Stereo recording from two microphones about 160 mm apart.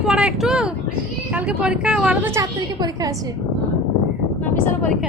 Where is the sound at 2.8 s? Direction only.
25° right (ahead or behind).